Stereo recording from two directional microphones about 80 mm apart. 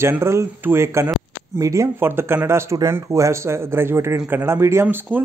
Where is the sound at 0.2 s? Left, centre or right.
Right.